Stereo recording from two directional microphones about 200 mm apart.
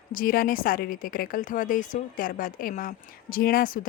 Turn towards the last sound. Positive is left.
turn(degrees=45)  # may be behind; listen again after turning